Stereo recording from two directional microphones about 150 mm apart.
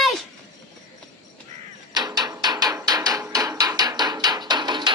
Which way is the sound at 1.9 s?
25° right (ahead or behind).